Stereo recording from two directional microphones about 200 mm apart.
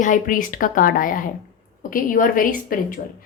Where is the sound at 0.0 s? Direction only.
40° left (ahead or behind).